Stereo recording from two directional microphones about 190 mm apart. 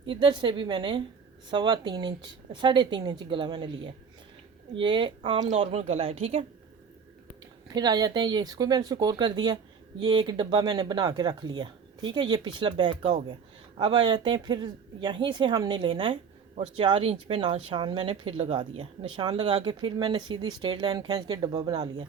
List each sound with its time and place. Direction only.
0.1 s speech: 25° right (ahead or behind)
7.7 s speech: 20° right (ahead or behind)